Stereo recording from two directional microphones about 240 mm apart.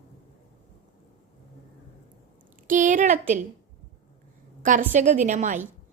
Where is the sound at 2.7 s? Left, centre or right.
Right.